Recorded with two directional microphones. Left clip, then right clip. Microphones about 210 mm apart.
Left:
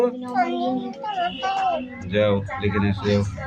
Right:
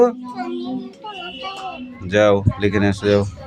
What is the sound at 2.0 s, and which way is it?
Speech, 40° right (ahead or behind).